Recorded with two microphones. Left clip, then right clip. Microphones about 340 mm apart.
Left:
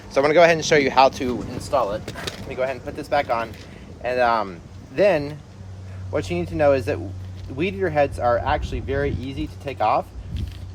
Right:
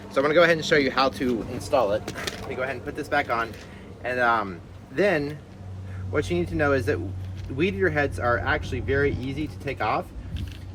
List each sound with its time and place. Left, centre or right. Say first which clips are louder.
0.1 s speech: left 4 dB; centre